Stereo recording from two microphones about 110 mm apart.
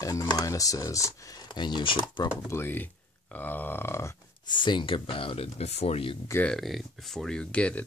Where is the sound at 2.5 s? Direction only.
20° left (ahead or behind).